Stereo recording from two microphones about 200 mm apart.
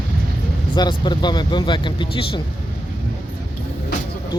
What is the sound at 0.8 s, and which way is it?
Speech, 20° left (ahead or behind).